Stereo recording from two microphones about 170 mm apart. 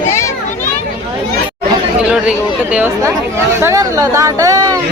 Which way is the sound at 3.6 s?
20° right (ahead or behind).